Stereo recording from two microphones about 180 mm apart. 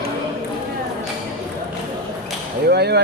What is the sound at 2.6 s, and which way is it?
Speech, 65° right (ahead or behind).